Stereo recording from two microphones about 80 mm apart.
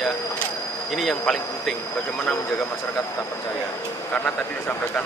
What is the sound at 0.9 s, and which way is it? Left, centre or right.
Speech, centre.